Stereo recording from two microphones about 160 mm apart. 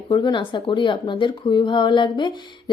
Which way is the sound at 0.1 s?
25° left (ahead or behind).